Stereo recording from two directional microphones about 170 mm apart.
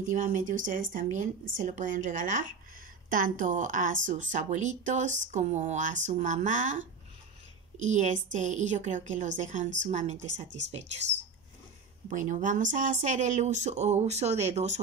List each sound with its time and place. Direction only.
0.1 s speech: 50° right (ahead or behind)
12.1 s speech: 50° right (ahead or behind)